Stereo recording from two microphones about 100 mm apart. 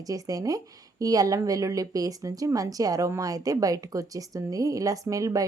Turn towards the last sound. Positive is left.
turn(degrees=-35)  # may be behind; listen again after turning